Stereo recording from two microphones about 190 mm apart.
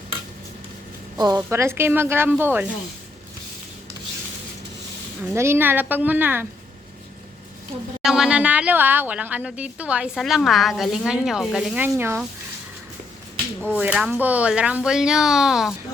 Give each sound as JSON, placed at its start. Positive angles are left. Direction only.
{"t": 1.1, "sound": "a woman's voice", "side_deg": -20}
{"t": 5.3, "sound": "speech", "side_deg": -15}
{"t": 8.0, "sound": "speech", "side_deg": -5}
{"t": 13.7, "sound": "speech", "side_deg": -5}